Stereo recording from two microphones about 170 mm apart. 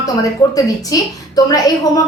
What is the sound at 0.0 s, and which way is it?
A woman's voice, 20° left (ahead or behind).